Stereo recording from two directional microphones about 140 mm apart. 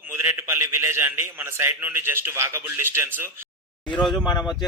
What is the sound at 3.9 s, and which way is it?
Speech, 5° left (ahead or behind).